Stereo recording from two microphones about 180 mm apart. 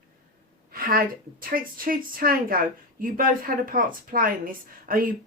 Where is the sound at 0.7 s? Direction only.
55° right (ahead or behind).